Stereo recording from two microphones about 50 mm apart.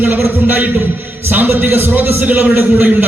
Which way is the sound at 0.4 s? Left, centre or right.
Right.